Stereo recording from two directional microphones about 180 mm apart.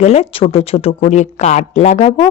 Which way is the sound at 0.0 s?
35° left (ahead or behind).